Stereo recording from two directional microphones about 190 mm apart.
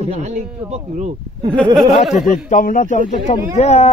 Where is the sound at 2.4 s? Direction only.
40° left (ahead or behind).